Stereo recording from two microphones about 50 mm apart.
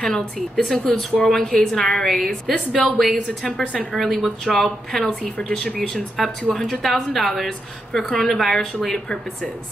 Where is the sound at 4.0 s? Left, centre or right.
Centre.